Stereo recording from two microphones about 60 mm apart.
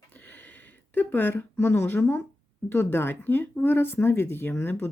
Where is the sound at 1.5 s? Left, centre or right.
Left.